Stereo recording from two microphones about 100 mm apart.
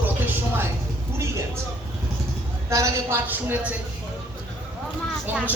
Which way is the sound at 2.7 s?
25° right (ahead or behind).